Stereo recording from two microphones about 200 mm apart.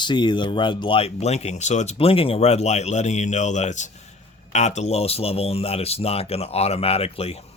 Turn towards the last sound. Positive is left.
turn(degrees=30)  # may be behind; listen again after turning